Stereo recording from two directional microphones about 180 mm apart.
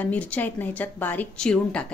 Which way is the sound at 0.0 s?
10° left (ahead or behind).